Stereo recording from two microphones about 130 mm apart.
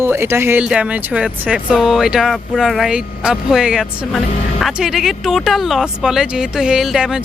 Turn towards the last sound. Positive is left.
turn(degrees=-5)  # may be behind; listen again after turning